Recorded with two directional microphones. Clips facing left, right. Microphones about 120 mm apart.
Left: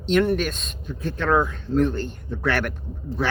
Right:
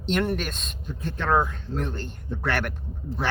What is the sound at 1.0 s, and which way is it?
Speech, 20° right (ahead or behind).